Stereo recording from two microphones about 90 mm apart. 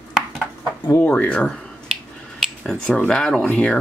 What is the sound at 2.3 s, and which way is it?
Dishes, 5° left (ahead or behind).